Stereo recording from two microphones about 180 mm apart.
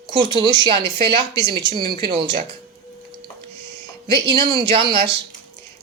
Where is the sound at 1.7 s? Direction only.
60° right (ahead or behind).